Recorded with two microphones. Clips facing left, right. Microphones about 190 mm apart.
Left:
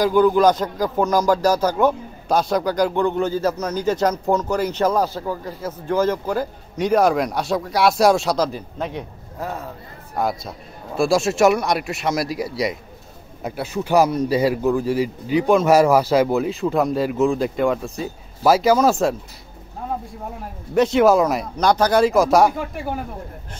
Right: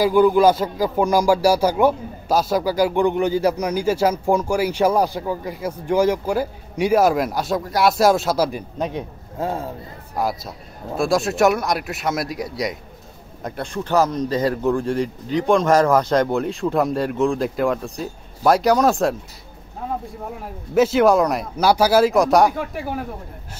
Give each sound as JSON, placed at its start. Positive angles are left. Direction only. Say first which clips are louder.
{"t": 0.0, "sound": "speech", "louder": "right 1 dB", "side_deg": -10}
{"t": 8.5, "sound": "a man's voice", "louder": "right 2 dB", "side_deg": -15}
{"t": 10.1, "sound": "a man's voice", "louder": "left 1 dB", "side_deg": 0}
{"t": 20.7, "sound": "a man's voice", "louder": "even", "side_deg": 0}